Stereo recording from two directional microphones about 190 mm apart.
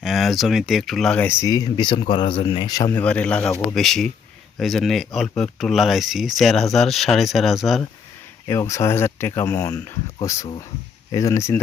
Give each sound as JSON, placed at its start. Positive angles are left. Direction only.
{"t": 0.0, "sound": "speech", "side_deg": 0}
{"t": 2.9, "sound": "speech", "side_deg": 5}
{"t": 8.4, "sound": "speech", "side_deg": 15}